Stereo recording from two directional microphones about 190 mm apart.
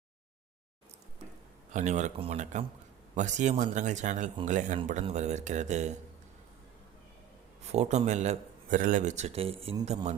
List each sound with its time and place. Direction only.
1.7 s speech: 40° right (ahead or behind)
7.7 s speech: 35° right (ahead or behind)